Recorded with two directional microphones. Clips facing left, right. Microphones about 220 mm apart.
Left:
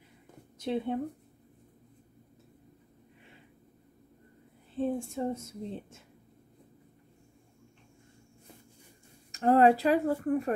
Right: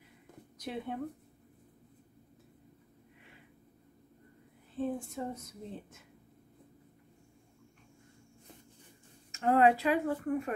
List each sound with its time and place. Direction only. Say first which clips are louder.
0.6 s speech: left 7 dB; 25° left (ahead or behind)
4.7 s speech: left 4 dB; 25° left (ahead or behind)
9.3 s speech: left 4 dB; 35° left (ahead or behind)